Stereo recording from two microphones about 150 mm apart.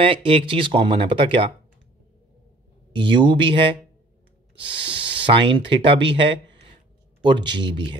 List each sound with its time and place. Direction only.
0.0 s speech: 35° right (ahead or behind)
2.9 s speech: 35° right (ahead or behind)